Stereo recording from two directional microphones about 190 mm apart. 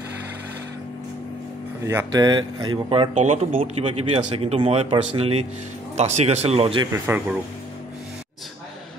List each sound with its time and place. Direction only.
1.9 s speech: 15° right (ahead or behind)